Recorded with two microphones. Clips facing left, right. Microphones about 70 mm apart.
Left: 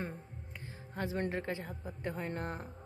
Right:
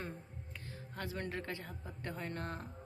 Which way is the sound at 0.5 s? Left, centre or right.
Left.